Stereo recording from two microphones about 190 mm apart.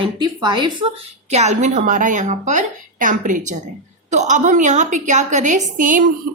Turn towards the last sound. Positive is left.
turn(degrees=-45)  # may be behind; listen again after turning